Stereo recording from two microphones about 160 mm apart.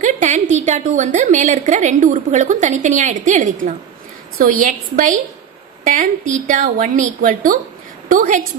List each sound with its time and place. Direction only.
0.0 s a woman's voice: 50° right (ahead or behind)